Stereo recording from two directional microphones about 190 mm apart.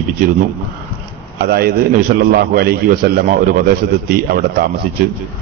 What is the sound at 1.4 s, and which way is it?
A man's voice, 55° right (ahead or behind).